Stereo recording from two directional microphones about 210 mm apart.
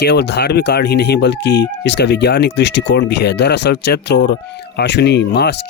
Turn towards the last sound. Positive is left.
turn(degrees=55)  # may be behind; listen again after turning